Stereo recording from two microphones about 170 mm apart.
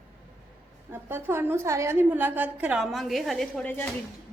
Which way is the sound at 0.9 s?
10° right (ahead or behind).